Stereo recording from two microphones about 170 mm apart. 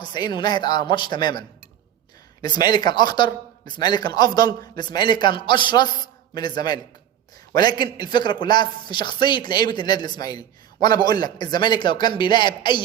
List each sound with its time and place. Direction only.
0.0 s a man's voice: 25° left (ahead or behind)